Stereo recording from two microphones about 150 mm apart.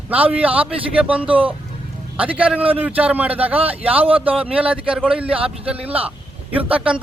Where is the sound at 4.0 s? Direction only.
40° right (ahead or behind).